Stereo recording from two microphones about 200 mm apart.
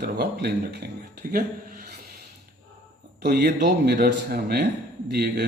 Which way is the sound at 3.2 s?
50° right (ahead or behind).